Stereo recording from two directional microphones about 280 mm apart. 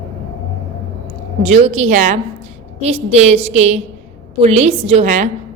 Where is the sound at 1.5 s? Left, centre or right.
Right.